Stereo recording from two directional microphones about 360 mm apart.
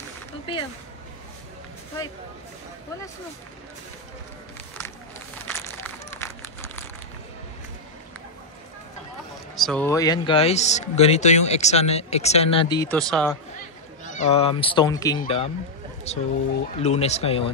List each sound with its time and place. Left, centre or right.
0.5 s speech: centre
5.5 s crumpling: centre
9.6 s speech: centre
14.0 s speech: centre